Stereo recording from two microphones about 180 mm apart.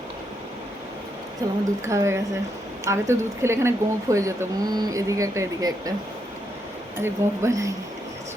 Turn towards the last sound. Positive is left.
turn(degrees=-20)  # may be behind; listen again after turning